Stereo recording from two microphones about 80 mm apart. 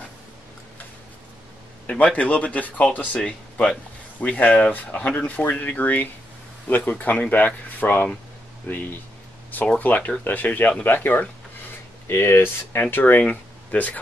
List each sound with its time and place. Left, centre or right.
1.9 s speech: centre